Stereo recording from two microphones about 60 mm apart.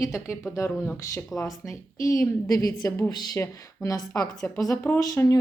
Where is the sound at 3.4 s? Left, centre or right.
Left.